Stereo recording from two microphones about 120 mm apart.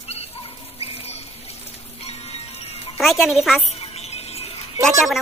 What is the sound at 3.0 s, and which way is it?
Speech, centre (ahead or behind).